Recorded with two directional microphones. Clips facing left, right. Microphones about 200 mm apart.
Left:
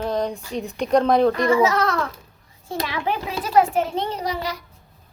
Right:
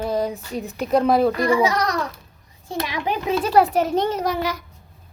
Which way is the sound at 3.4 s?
35° right (ahead or behind).